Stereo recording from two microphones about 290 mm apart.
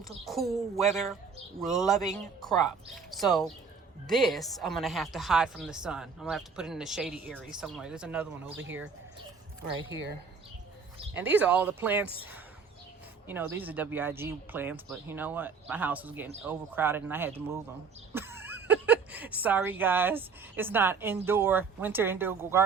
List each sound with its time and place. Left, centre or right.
0.1 s a woman's voice: centre
8.5 s speech: right
11.1 s speech: centre
13.2 s speech: centre